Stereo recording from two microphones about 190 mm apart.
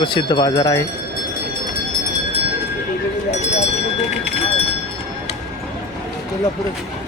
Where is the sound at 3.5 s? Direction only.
35° left (ahead or behind).